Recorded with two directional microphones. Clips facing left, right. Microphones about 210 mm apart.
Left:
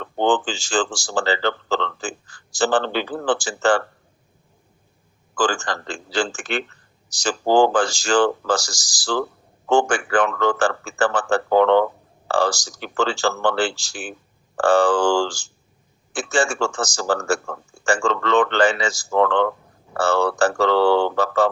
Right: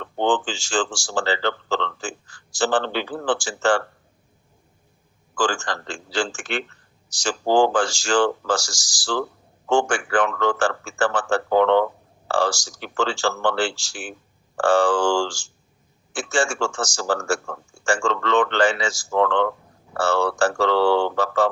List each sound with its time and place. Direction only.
0.0 s a man's voice: 40° left (ahead or behind)
5.4 s a man's voice: 40° left (ahead or behind)
9.6 s a man's voice: 35° left (ahead or behind)